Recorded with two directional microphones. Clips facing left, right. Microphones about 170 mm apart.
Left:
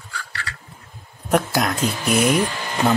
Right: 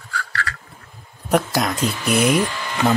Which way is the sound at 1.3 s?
Centre (ahead or behind).